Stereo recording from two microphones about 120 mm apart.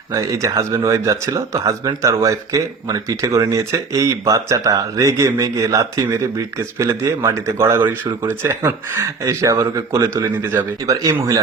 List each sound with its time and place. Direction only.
0.1 s speech: 25° right (ahead or behind)